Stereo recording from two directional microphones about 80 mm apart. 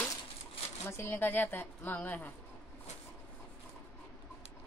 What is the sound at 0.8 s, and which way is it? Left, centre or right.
A woman's voice, left.